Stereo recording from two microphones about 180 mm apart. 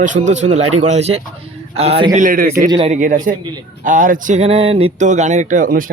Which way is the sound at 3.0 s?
45° right (ahead or behind).